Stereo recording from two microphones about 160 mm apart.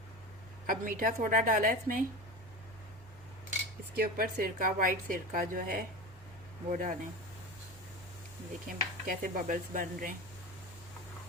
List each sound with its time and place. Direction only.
0.7 s a woman's voice: 60° right (ahead or behind)
3.9 s a woman's voice: 80° right
4.4 s a woman's voice: 55° right (ahead or behind)
9.0 s a woman's voice: 60° right (ahead or behind)